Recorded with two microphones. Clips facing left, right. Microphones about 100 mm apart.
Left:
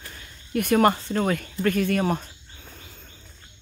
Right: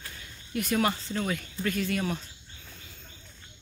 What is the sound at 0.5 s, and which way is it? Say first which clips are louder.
Speech: left 8 dB; 55° left (ahead or behind).